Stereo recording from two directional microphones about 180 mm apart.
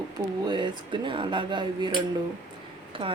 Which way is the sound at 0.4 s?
25° right (ahead or behind).